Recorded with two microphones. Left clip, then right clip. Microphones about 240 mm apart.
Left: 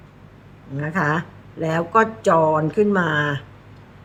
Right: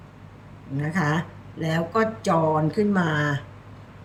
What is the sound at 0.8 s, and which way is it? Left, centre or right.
Speech, centre.